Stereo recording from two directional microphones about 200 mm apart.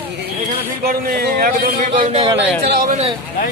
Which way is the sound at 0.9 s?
50° right (ahead or behind).